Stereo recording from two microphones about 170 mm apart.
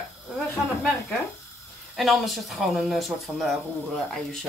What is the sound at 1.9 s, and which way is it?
Speech, centre (ahead or behind).